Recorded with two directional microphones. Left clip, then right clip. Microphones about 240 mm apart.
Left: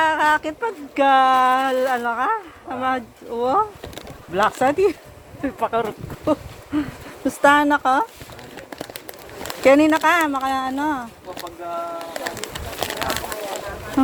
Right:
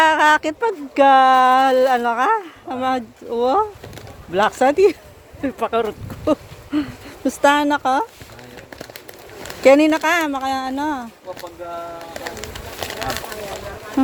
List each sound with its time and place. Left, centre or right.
0.0 s speech: right
8.7 s a sound: centre
9.6 s speech: right
12.1 s pigeon: centre